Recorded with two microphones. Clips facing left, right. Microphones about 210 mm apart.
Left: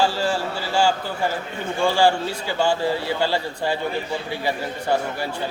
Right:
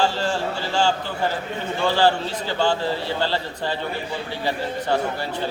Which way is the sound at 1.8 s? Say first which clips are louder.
Left 1 dB; 10° left (ahead or behind).